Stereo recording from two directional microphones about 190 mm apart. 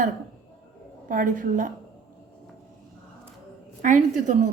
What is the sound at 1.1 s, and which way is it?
Speech, 45° right (ahead or behind).